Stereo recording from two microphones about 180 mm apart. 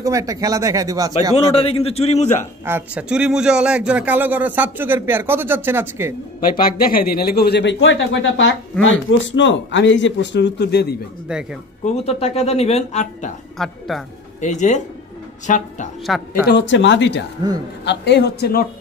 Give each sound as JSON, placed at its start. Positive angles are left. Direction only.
{"t": 0.0, "sound": "speech", "side_deg": -20}
{"t": 1.3, "sound": "speech", "side_deg": 35}
{"t": 2.6, "sound": "a man's voice", "side_deg": -10}
{"t": 6.5, "sound": "speech", "side_deg": 55}
{"t": 11.8, "sound": "speech", "side_deg": 35}
{"t": 13.6, "sound": "speech", "side_deg": 0}
{"t": 14.4, "sound": "speech", "side_deg": 40}
{"t": 16.1, "sound": "speech", "side_deg": 0}
{"t": 16.4, "sound": "speech", "side_deg": 75}
{"t": 17.8, "sound": "speech", "side_deg": 70}